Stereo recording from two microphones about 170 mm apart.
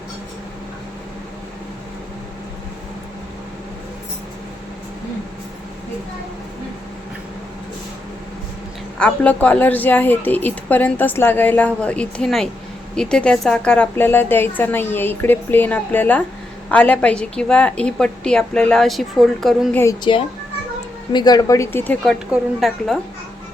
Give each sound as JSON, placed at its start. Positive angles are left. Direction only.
{"t": 9.0, "sound": "a woman's voice", "side_deg": 10}
{"t": 20.1, "sound": "speech", "side_deg": 30}
{"t": 22.0, "sound": "a woman's voice", "side_deg": 0}